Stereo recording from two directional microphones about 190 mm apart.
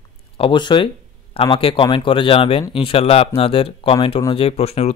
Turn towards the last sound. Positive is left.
turn(degrees=35)  # may be behind; listen again after turning